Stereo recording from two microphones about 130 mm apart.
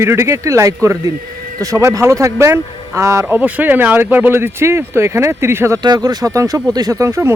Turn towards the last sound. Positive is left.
turn(degrees=-20)  # may be behind; listen again after turning